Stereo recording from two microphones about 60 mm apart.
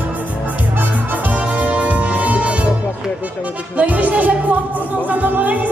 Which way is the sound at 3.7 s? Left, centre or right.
Right.